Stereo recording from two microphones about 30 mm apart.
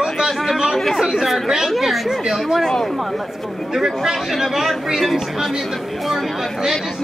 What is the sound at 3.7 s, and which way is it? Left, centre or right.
Speech, centre.